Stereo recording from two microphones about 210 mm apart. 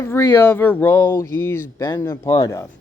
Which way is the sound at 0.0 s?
10° left (ahead or behind).